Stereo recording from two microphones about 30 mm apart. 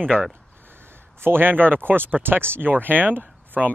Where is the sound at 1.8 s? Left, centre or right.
Right.